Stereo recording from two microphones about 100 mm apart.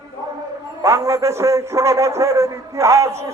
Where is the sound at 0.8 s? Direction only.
30° right (ahead or behind).